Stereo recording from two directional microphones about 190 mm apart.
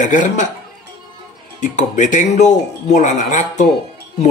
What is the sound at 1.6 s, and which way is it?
Speech, 40° left (ahead or behind).